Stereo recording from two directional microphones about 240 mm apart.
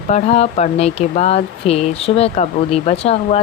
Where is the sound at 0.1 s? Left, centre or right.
Left.